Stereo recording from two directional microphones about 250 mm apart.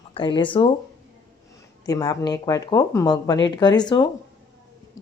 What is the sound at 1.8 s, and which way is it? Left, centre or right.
Speech, centre.